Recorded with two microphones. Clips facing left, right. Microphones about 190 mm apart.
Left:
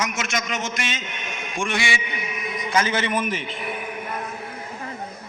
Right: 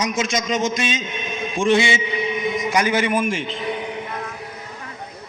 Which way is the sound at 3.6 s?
25° right (ahead or behind).